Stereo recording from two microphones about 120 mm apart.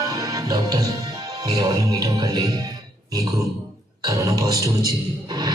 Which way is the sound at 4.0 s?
25° right (ahead or behind).